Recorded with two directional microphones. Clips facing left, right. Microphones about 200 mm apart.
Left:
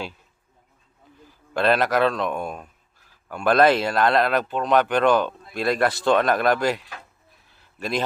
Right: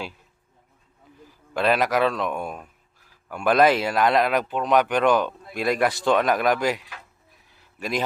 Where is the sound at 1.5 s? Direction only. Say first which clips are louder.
Left 1 dB; 10° right (ahead or behind).